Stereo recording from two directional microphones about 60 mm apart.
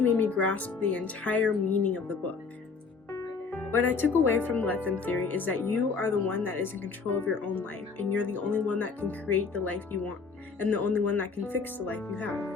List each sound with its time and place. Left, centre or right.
0.0 s speech: left
3.5 s speech: left